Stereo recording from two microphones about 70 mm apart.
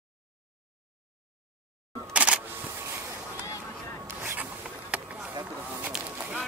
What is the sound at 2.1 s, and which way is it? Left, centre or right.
Single-lens reflex camera, centre.